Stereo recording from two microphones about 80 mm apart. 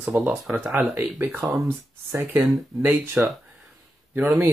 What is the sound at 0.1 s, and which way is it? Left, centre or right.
Speech, right.